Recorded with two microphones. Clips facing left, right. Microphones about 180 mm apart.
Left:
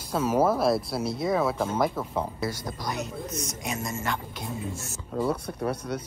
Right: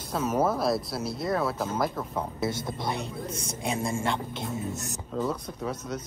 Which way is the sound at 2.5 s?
25° right (ahead or behind).